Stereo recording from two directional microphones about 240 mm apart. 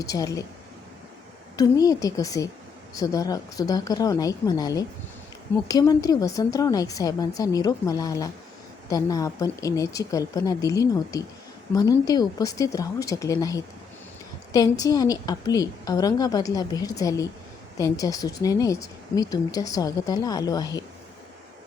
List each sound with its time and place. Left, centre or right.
0.0 s speech: centre
1.5 s speech: centre